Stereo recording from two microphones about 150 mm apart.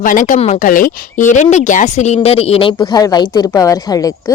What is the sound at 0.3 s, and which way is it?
Speech, 45° left (ahead or behind).